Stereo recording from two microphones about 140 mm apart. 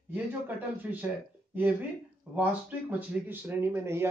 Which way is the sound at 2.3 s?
10° right (ahead or behind).